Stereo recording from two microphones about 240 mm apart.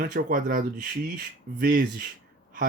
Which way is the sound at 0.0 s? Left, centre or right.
Right.